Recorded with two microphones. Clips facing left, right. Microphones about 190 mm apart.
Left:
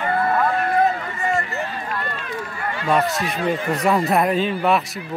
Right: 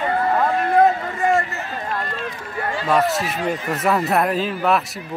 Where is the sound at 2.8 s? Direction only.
Centre (ahead or behind).